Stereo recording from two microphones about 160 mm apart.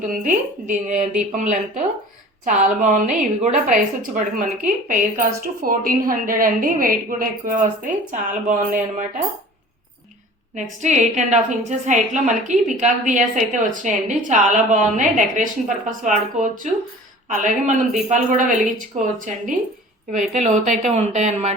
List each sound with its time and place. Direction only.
0.0 s a woman's voice: 55° right (ahead or behind)
10.5 s a woman's voice: 50° right (ahead or behind)